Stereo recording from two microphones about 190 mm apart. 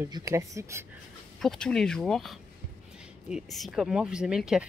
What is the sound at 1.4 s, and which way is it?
Speech, 5° left (ahead or behind).